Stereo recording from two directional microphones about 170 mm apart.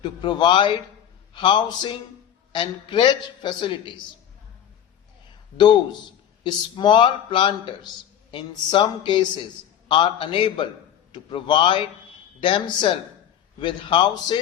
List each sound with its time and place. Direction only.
0.0 s a man's voice: 25° left (ahead or behind)
5.5 s a man's voice: 25° left (ahead or behind)